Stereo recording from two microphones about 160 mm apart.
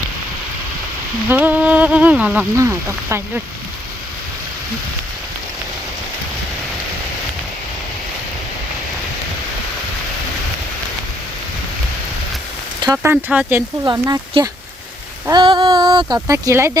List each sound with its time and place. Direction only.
1.3 s a sound: 10° right (ahead or behind)
2.6 s speech: 15° right (ahead or behind)
13.0 s speech: 10° right (ahead or behind)
13.8 s speech: 20° right (ahead or behind)
15.3 s speech: 30° right (ahead or behind)